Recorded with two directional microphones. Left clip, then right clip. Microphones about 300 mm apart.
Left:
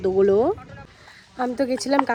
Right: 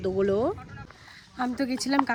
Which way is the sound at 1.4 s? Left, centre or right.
Centre.